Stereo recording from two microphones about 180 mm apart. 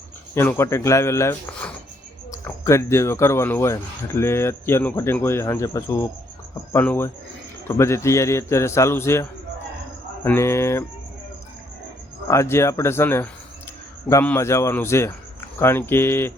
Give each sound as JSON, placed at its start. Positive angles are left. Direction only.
{"t": 0.3, "sound": "speech", "side_deg": 15}
{"t": 10.2, "sound": "speech", "side_deg": 15}
{"t": 12.3, "sound": "speech", "side_deg": 15}